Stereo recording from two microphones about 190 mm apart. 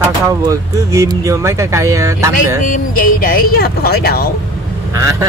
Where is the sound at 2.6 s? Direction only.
45° left (ahead or behind).